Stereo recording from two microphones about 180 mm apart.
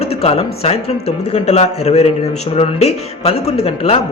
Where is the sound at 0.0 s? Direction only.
35° left (ahead or behind).